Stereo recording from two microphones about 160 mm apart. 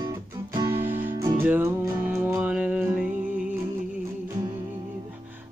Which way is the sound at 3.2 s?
55° right (ahead or behind).